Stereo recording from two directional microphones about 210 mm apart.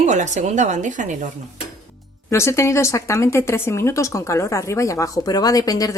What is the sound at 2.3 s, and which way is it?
Speech, 15° left (ahead or behind).